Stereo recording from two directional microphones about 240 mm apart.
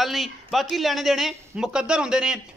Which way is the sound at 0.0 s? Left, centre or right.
Centre.